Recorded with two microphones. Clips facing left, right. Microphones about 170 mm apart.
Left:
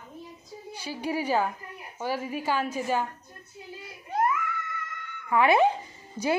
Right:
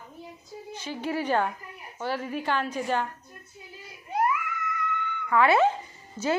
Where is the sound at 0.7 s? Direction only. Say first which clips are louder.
Even; 10° left (ahead or behind).